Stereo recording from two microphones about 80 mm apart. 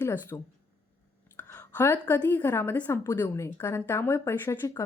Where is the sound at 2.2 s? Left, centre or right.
Left.